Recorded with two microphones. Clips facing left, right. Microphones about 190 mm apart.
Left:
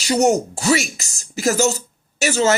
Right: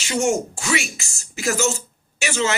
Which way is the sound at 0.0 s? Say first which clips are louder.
Left 5 dB; 40° left (ahead or behind).